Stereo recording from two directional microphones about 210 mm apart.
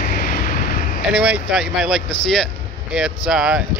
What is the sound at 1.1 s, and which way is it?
Speech, 5° right (ahead or behind).